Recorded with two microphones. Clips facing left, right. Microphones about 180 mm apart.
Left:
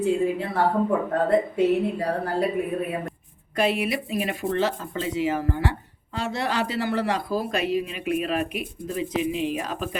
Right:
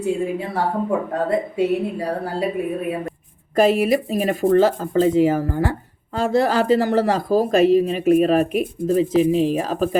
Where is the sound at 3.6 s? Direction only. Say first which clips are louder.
Right 8 dB; 45° right (ahead or behind).